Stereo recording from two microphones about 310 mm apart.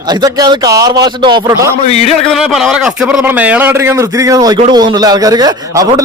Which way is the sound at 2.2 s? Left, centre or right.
Centre.